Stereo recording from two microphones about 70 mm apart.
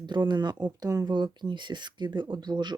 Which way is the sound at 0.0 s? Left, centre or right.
Right.